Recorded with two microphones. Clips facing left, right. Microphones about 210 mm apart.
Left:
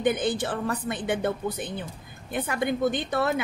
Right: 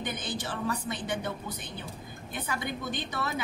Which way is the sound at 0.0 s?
55° left (ahead or behind).